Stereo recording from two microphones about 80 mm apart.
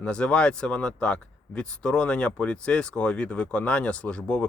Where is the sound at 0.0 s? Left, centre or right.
Centre.